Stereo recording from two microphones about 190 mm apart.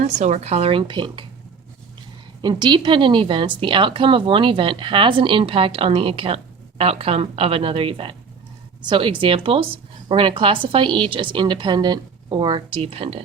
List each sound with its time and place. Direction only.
0.0 s speech: 35° right (ahead or behind)
2.4 s a woman's voice: 20° right (ahead or behind)